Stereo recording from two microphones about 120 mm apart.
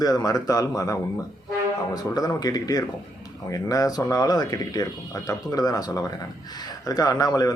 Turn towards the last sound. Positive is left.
turn(degrees=30)  # may be behind; listen again after turning